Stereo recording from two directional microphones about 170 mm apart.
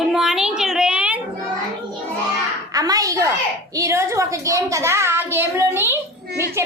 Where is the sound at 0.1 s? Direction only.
Centre (ahead or behind).